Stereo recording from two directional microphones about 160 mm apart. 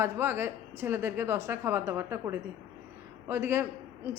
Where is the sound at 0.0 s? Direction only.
15° right (ahead or behind).